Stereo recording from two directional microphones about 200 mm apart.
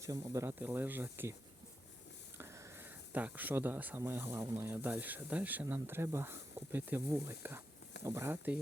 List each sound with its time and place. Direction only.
0.0 s speech: 15° right (ahead or behind)
2.4 s speech: 10° right (ahead or behind)